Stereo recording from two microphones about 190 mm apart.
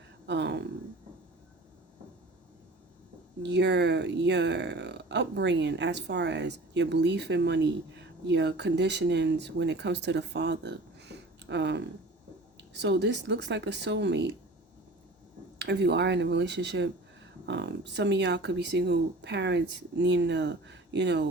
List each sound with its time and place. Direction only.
0.3 s a sound: 65° right (ahead or behind)
3.4 s speech: 65° right (ahead or behind)
15.5 s speech: 65° right (ahead or behind)